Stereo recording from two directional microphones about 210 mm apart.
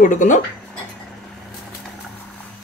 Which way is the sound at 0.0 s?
35° left (ahead or behind).